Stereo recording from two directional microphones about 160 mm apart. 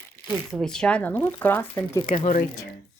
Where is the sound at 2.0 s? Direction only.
40° left (ahead or behind).